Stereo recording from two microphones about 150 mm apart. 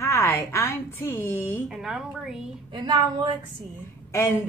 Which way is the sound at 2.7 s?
30° right (ahead or behind).